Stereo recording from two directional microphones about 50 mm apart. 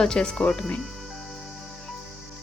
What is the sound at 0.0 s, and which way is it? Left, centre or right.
Speech, centre.